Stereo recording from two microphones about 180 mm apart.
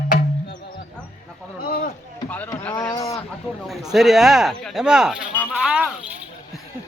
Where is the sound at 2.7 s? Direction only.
20° left (ahead or behind).